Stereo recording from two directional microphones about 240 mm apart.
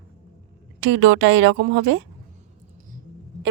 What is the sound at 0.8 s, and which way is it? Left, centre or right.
A woman's voice, right.